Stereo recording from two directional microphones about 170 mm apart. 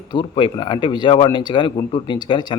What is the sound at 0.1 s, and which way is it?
Speech, 30° left (ahead or behind).